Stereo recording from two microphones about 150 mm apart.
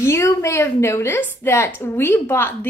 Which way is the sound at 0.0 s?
20° left (ahead or behind).